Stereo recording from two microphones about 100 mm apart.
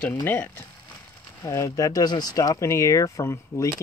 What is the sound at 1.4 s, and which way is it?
Speech, 30° left (ahead or behind).